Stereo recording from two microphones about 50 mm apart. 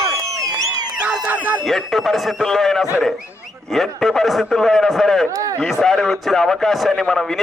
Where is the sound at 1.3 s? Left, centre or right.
Right.